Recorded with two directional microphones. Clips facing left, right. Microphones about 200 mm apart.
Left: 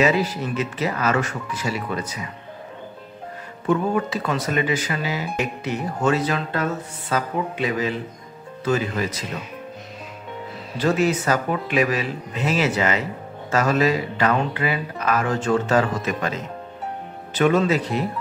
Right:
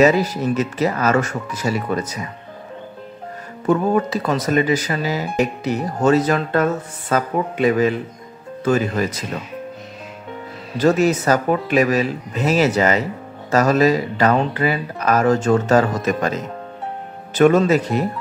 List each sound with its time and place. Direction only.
0.0 s speech: 40° right (ahead or behind)
3.6 s speech: 40° right (ahead or behind)
10.8 s speech: 40° right (ahead or behind)